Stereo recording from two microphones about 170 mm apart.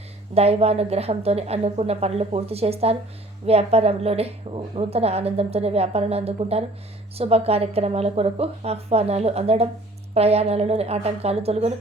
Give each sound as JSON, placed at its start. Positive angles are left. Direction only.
{"t": 0.3, "sound": "a woman's voice", "side_deg": -35}